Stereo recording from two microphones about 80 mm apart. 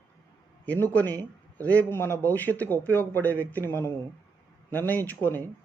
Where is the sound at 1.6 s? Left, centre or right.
Centre.